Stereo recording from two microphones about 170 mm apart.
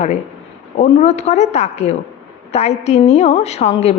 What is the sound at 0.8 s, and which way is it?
A woman's voice, 40° left (ahead or behind).